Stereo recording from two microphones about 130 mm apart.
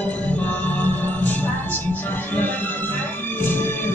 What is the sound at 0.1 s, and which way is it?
Music, 10° left (ahead or behind).